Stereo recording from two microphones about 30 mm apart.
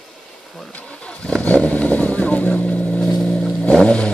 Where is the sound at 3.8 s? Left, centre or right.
Left.